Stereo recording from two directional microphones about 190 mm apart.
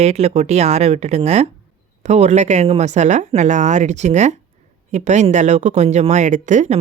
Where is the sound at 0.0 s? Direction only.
35° right (ahead or behind).